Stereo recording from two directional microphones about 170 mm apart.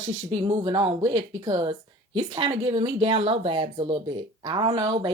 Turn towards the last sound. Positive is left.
turn(degrees=-25)  # may be behind; listen again after turning